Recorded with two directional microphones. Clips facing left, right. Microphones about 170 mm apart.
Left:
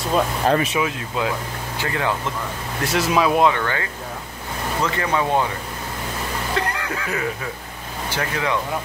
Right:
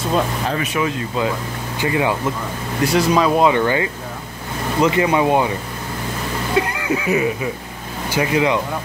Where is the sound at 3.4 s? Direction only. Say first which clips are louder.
Right 5 dB; 15° right (ahead or behind).